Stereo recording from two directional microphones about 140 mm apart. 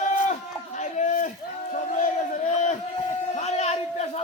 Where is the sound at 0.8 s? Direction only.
60° left (ahead or behind).